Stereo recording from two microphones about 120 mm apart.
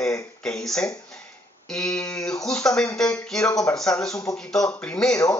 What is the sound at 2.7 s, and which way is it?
Speech, 30° left (ahead or behind).